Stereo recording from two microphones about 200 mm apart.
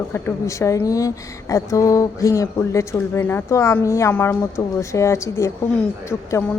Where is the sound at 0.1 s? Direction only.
15° left (ahead or behind).